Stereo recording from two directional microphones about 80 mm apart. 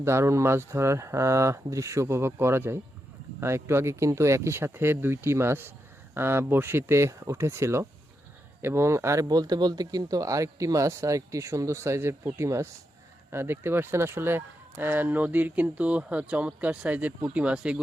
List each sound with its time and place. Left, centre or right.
0.0 s speech: right; by 17.7 s centre